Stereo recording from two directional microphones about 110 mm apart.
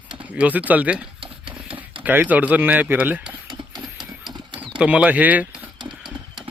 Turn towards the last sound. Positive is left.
turn(degrees=-15)  # may be behind; listen again after turning